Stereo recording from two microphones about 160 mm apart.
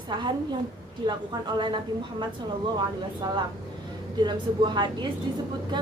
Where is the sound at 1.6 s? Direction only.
30° right (ahead or behind).